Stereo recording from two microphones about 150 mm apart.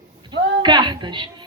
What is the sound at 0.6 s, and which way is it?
Speech, 30° right (ahead or behind).